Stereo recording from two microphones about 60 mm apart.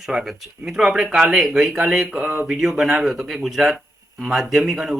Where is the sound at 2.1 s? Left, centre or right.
Right.